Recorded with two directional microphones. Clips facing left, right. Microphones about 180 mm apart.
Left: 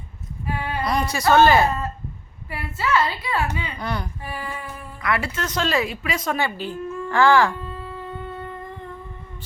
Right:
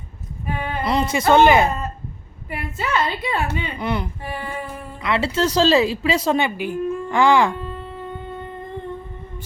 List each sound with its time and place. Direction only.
0.4 s a sound: 20° right (ahead or behind)
2.5 s a woman's voice: 20° right (ahead or behind)
6.4 s speech: 15° right (ahead or behind)